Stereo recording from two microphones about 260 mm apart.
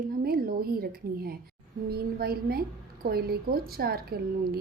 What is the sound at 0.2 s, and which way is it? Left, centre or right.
A woman's voice, right.